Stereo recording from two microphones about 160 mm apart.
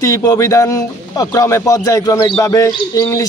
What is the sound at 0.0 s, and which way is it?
A man's voice, 20° left (ahead or behind).